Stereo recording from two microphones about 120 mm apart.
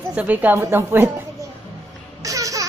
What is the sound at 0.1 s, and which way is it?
A man's voice, 10° right (ahead or behind).